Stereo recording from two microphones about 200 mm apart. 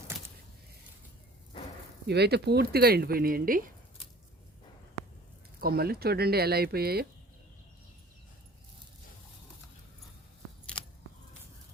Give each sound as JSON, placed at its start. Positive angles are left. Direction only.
{"t": 2.0, "sound": "speech", "side_deg": -55}
{"t": 5.5, "sound": "speech", "side_deg": -50}